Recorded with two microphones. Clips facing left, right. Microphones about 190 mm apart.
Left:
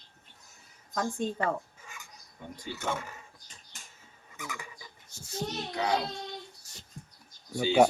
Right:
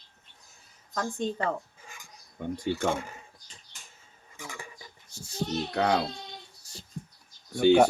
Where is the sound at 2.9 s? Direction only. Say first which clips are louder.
Right 4 dB; 30° right (ahead or behind).